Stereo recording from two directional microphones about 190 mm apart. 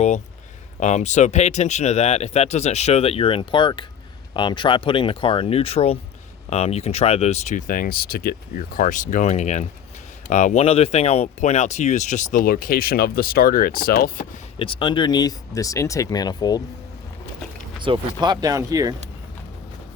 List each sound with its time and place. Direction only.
0.8 s speech: 40° left (ahead or behind)
14.6 s speech: 25° left (ahead or behind)
17.8 s speech: 25° right (ahead or behind)